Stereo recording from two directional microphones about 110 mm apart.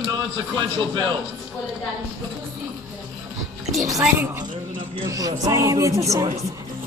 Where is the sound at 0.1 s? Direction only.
45° right (ahead or behind).